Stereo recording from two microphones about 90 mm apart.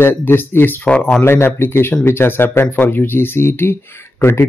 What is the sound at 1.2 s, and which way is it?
Speech, 25° left (ahead or behind).